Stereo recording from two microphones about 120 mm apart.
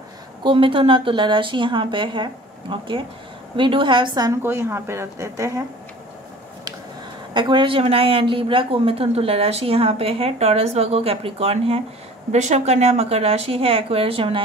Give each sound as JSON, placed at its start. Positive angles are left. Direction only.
{"t": 0.4, "sound": "a woman's voice", "side_deg": -45}
{"t": 4.3, "sound": "a woman's voice", "side_deg": -20}
{"t": 7.3, "sound": "a woman's voice", "side_deg": -40}
{"t": 12.3, "sound": "a woman's voice", "side_deg": -70}